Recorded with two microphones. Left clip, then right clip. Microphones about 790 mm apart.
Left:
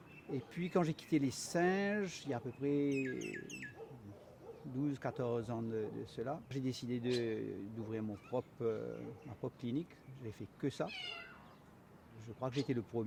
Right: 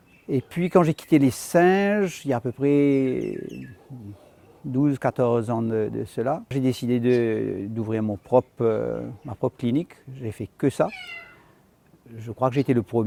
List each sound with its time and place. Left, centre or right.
0.3 s speech: right
4.8 s speech: right
12.2 s speech: right